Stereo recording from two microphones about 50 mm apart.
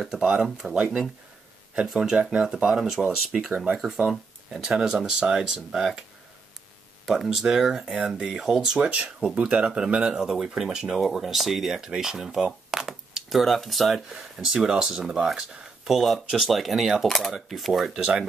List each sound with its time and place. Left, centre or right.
0.2 s speech: centre
2.0 s speech: centre
3.7 s speech: centre
7.3 s speech: centre
8.7 s speech: centre
12.7 s a sound: centre
14.0 s speech: centre